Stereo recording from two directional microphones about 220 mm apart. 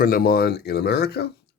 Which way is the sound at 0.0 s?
40° left (ahead or behind).